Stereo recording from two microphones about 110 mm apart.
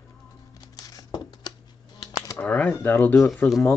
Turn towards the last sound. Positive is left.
turn(degrees=0)  # may be behind; listen again after turning